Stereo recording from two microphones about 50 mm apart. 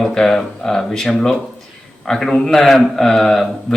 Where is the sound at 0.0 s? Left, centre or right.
Centre.